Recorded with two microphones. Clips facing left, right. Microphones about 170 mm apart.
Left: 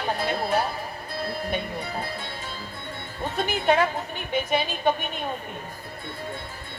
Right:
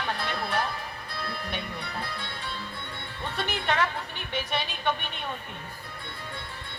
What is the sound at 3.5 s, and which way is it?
A woman's voice, 40° left (ahead or behind).